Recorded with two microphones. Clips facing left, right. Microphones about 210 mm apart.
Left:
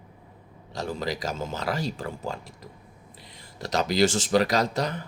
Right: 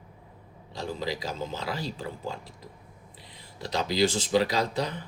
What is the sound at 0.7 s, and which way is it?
Speech, 80° left.